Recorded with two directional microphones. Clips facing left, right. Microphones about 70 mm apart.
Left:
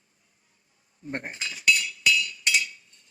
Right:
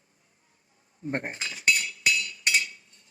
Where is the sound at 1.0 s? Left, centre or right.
Right.